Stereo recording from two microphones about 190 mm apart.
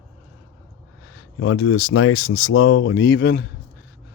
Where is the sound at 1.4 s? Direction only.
90° left; by 3.4 s 65° left (ahead or behind).